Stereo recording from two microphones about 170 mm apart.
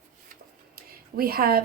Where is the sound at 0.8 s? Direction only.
60° right (ahead or behind).